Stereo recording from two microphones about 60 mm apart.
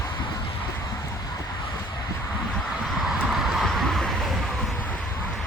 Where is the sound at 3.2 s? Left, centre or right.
Centre.